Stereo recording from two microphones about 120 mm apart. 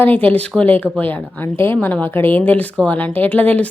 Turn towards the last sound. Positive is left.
turn(degrees=15)  # may be behind; listen again after turning